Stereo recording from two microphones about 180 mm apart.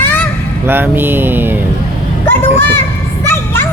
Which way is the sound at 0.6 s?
10° right (ahead or behind).